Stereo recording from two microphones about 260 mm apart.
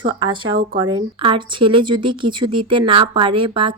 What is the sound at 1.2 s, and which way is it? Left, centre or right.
Speech, centre.